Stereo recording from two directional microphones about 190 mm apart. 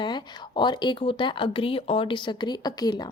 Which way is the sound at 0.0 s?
25° left (ahead or behind).